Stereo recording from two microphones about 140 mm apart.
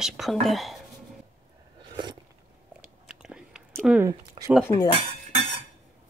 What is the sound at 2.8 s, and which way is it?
Biting, 5° right (ahead or behind).